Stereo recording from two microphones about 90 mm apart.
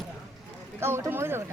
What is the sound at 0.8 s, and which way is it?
Speech, 30° right (ahead or behind).